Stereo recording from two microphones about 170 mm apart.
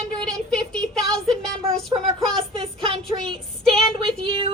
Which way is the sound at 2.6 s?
35° right (ahead or behind).